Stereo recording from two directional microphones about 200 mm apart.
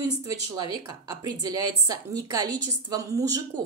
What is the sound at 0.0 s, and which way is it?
A woman's voice, 20° right (ahead or behind).